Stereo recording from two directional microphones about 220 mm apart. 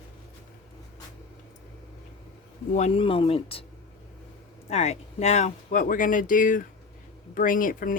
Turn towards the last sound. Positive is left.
turn(degrees=40)  # may be behind; listen again after turning